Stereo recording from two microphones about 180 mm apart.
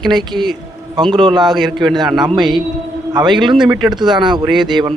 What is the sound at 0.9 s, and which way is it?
Speech, 25° right (ahead or behind).